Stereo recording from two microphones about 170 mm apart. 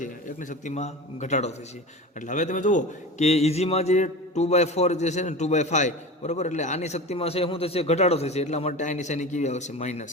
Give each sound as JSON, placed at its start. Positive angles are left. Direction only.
{"t": 0.0, "sound": "a man's voice", "side_deg": 50}